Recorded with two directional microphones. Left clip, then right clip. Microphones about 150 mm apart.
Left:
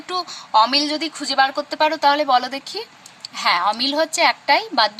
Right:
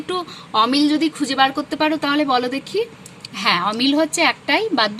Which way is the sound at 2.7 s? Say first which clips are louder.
Right 8 dB; 5° left (ahead or behind).